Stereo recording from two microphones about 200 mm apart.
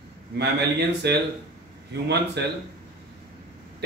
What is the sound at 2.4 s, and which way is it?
Speech, 55° right (ahead or behind).